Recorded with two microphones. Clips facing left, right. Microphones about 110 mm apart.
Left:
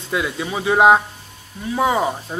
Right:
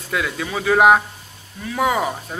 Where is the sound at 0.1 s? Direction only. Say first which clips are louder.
Left 1 dB; 20° left (ahead or behind).